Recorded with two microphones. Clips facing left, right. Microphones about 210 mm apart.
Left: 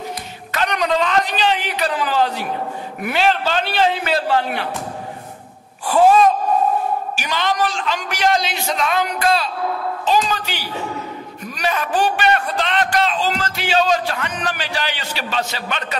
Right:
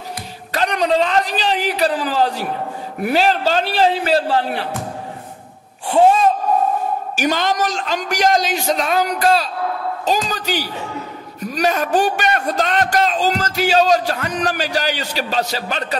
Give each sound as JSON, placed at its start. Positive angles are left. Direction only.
{"t": 0.5, "sound": "a man's voice", "side_deg": -35}
{"t": 5.9, "sound": "speech", "side_deg": -25}
{"t": 7.2, "sound": "a man's voice", "side_deg": -45}